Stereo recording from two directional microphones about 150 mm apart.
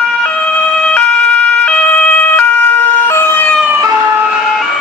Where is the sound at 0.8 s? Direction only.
5° left (ahead or behind).